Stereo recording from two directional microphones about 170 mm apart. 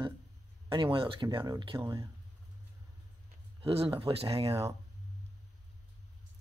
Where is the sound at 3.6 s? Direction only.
35° right (ahead or behind).